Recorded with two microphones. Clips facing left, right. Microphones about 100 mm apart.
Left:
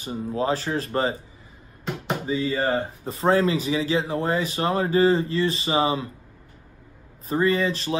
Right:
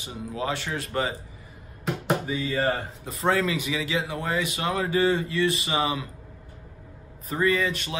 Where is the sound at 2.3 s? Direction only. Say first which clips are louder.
Left 2 dB; 25° left (ahead or behind).